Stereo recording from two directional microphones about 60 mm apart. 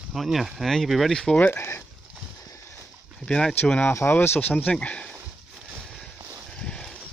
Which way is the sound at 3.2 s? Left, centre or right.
Right.